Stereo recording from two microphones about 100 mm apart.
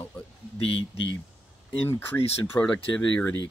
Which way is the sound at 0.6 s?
70° left (ahead or behind).